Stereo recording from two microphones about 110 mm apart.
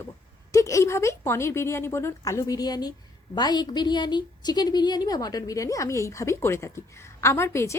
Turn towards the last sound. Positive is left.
turn(degrees=25)  # may be behind; listen again after turning